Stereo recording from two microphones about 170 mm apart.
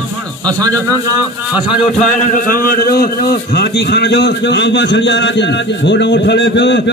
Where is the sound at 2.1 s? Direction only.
50° left (ahead or behind).